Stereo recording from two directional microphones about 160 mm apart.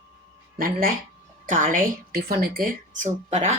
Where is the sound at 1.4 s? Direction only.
50° right (ahead or behind).